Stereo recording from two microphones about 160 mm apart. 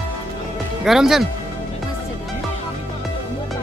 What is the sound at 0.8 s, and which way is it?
Speech, 5° right (ahead or behind).